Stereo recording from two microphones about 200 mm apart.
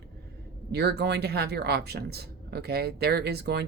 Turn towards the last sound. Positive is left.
turn(degrees=-55)  # may be behind; listen again after turning